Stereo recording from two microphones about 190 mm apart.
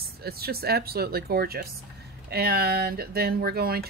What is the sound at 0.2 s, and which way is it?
Speech, 55° right (ahead or behind).